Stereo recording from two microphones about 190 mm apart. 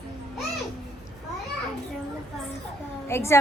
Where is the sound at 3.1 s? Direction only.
15° left (ahead or behind).